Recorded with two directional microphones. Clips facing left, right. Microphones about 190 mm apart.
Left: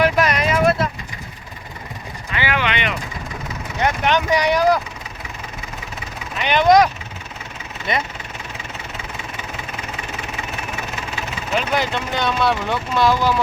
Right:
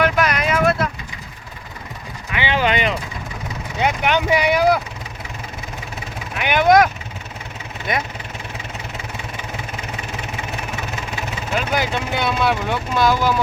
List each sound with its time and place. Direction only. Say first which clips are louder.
0.0 s vehicle: left 1 dB; centre (ahead or behind)
2.6 s a sound: right 7 dB; 40° right (ahead or behind)
3.8 s vehicle: even; 10° right (ahead or behind)
6.3 s speech: even; 10° right (ahead or behind)
11.5 s speech: left 1 dB; 5° right (ahead or behind)